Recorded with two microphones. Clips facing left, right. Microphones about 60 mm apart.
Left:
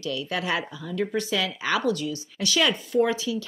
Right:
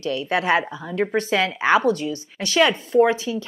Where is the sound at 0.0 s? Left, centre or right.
Right.